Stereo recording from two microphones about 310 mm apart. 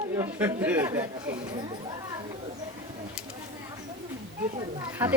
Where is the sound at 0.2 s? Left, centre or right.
Centre.